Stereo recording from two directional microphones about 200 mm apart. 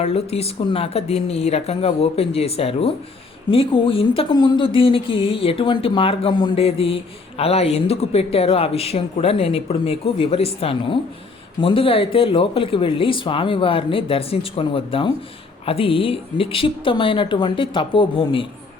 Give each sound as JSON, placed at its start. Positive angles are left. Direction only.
{"t": 0.0, "sound": "speech", "side_deg": 30}